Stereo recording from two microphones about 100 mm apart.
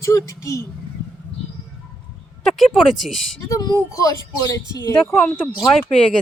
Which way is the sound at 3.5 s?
35° left (ahead or behind).